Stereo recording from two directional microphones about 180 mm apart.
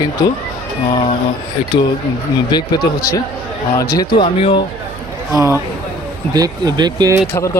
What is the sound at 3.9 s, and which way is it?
Speech, 25° left (ahead or behind).